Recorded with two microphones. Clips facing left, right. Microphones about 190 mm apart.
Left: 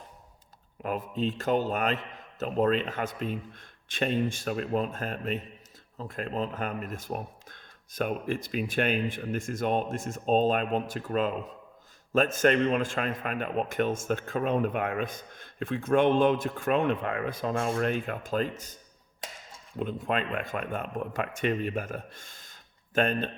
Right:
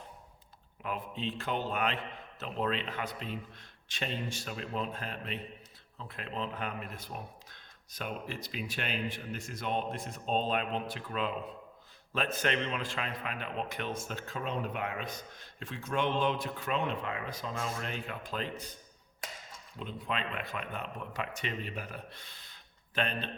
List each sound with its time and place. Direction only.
0.8 s a man's voice: 45° left (ahead or behind)
19.8 s a man's voice: 50° left (ahead or behind)